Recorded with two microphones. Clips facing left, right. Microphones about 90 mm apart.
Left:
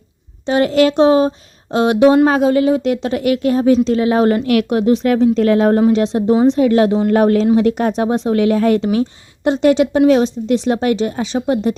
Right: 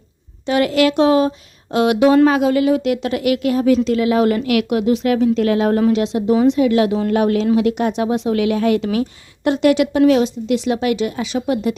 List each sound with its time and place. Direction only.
0.4 s speech: 30° left (ahead or behind)